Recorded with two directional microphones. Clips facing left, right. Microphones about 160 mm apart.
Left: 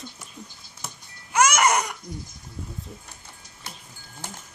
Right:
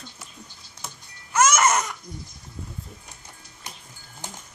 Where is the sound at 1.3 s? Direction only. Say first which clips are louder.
Even; 15° left (ahead or behind).